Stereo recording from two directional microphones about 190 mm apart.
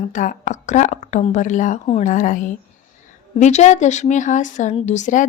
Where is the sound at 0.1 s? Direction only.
40° left (ahead or behind).